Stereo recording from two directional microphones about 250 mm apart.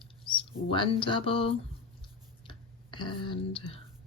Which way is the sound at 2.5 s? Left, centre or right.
Centre.